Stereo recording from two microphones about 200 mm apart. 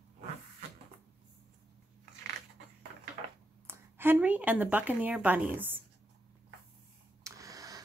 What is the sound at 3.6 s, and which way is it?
A woman's voice, 10° right (ahead or behind).